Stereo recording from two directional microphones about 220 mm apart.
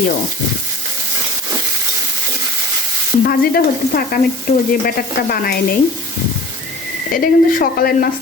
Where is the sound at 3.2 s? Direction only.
40° left (ahead or behind).